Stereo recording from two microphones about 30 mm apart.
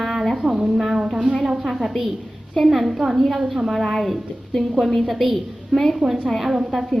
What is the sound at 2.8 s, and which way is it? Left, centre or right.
Speech, centre.